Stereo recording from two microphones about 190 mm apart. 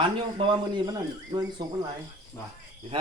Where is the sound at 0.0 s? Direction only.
25° right (ahead or behind).